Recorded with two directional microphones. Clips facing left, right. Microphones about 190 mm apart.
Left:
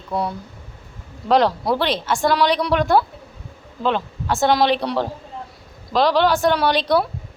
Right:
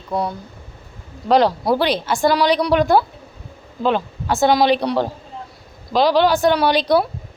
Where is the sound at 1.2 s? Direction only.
Centre (ahead or behind).